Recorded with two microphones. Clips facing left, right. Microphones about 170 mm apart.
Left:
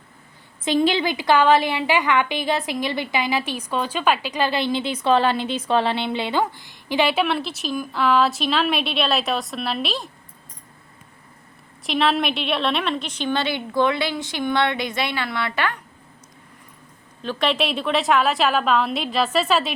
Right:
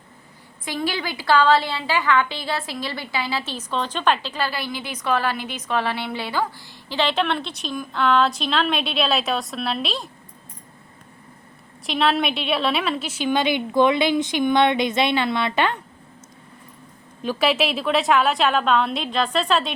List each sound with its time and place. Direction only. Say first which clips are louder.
0.6 s a woman's voice: left 7 dB; 20° left (ahead or behind); by 10.1 s centre (ahead or behind)
11.9 s a woman's voice: even; centre (ahead or behind); by 15.8 s 20° right (ahead or behind)
17.2 s a woman's voice: right 2 dB; 5° right (ahead or behind)